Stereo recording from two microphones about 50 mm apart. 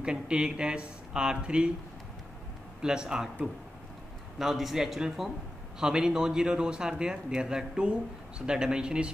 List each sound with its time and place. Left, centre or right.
0.0 s speech: centre
2.8 s speech: centre
4.4 s speech: centre